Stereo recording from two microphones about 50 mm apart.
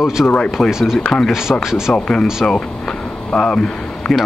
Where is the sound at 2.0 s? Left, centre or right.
Centre.